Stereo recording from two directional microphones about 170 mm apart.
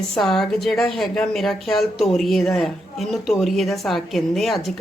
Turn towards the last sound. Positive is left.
turn(degrees=0)  # may be behind; listen again after turning